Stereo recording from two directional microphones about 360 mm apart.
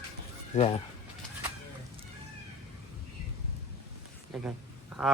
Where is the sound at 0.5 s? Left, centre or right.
Centre.